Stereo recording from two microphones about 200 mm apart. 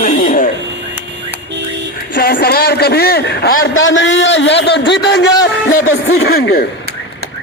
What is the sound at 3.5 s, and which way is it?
A man's voice, 80° left.